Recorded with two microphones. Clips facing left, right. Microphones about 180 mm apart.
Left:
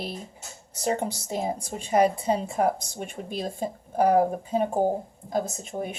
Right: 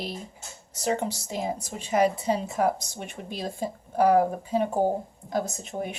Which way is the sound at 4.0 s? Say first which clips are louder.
Even; 30° left (ahead or behind).